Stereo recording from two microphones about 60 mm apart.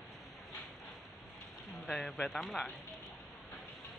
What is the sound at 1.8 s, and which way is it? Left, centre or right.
Speech, centre.